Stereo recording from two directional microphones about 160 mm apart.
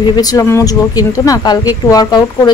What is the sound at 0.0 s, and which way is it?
Speech, 25° left (ahead or behind).